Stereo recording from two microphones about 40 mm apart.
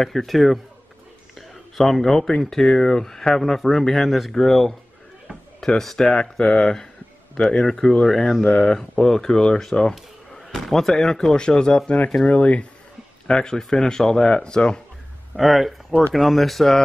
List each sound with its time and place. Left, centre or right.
0.0 s speech: centre
1.8 s speech: centre
5.8 s speech: centre; by 8.7 s left
9.0 s speech: centre
12.3 s speech: left
13.3 s speech: left
15.3 s speech: centre